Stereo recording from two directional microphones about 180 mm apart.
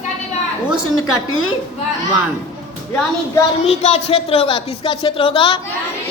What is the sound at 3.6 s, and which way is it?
Speech, 35° left (ahead or behind).